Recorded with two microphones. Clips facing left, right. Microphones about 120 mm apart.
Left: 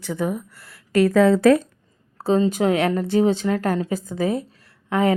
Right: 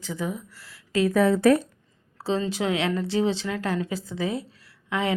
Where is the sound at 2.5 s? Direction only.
45° left (ahead or behind).